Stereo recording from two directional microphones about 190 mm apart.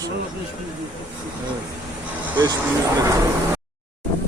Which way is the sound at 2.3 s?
20° right (ahead or behind).